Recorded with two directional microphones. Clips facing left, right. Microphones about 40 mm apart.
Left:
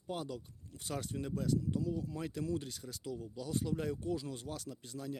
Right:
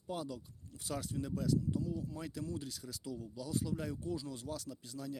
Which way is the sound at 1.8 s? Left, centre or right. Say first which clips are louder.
Left 2 dB; left.